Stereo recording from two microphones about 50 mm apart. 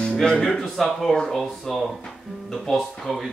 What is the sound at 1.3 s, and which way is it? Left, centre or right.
Chuckle, centre.